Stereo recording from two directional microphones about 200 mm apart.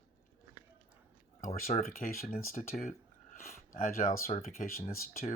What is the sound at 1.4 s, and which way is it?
Speech, 45° left (ahead or behind).